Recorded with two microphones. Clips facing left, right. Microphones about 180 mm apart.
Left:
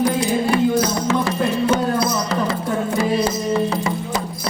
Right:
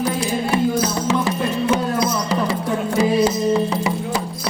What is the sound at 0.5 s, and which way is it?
Music, 20° right (ahead or behind).